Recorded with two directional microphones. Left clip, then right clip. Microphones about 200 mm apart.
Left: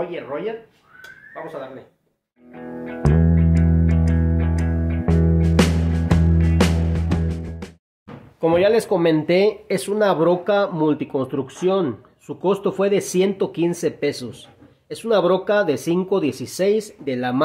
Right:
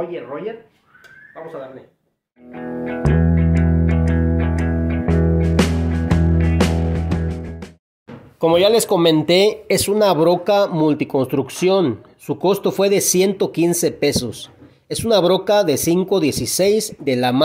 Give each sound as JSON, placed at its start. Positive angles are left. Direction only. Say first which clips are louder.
{"t": 0.1, "sound": "speech", "louder": "even", "side_deg": 0}
{"t": 2.5, "sound": "music", "louder": "right 6 dB", "side_deg": 0}
{"t": 8.4, "sound": "speech", "louder": "right 3 dB", "side_deg": -30}